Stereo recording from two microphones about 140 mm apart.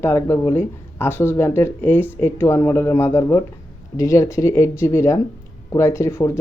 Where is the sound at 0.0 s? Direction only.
20° left (ahead or behind).